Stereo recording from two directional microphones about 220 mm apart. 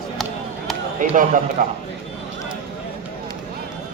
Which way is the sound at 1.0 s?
35° right (ahead or behind).